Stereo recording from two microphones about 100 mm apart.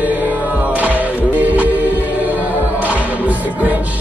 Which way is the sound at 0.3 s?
15° right (ahead or behind).